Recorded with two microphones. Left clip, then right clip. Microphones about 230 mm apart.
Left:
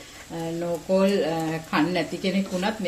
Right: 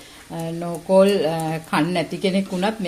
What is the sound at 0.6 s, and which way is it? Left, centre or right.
Speech, right.